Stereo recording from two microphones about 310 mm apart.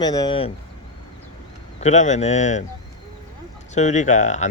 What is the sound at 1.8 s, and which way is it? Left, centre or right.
Speech, left.